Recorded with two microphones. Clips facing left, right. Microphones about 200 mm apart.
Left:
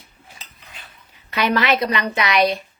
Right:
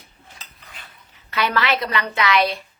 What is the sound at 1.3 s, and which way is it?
A woman's voice, 20° left (ahead or behind).